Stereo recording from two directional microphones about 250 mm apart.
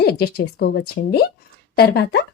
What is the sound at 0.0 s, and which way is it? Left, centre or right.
A woman's voice, left.